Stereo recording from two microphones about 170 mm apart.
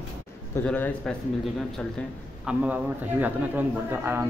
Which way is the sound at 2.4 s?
10° right (ahead or behind).